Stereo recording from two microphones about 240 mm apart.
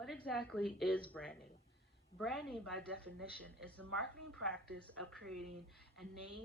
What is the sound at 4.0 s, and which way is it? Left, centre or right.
Speech, centre.